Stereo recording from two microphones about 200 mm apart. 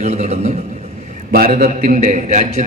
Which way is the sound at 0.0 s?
30° right (ahead or behind).